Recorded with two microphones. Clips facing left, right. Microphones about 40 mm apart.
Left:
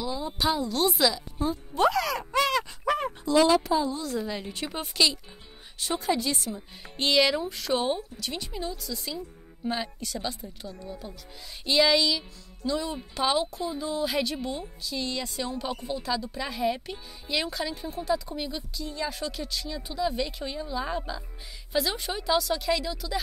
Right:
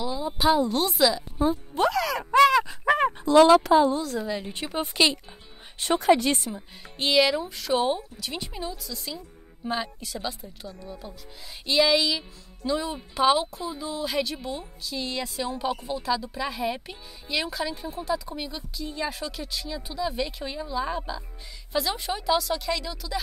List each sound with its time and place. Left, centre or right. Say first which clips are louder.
0.0 s a sound: right 4 dB; centre
0.7 s speech: right 2 dB; centre
1.1 s speech: right 5 dB; centre
1.8 s speech: left 1 dB; centre
2.3 s a sound: right 9 dB; centre
3.0 s a sound: right 6 dB; right
3.5 s a woman's voice: right 6 dB; right
4.0 s speech: right 2 dB; centre
5.8 s speech: right 7 dB; right
7.0 s speech: right 1 dB; centre